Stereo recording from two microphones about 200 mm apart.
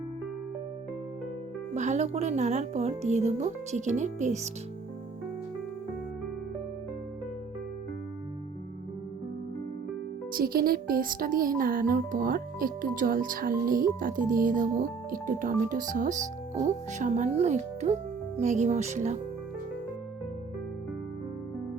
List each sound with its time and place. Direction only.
1.7 s speech: 35° right (ahead or behind)
10.3 s speech: 50° right (ahead or behind)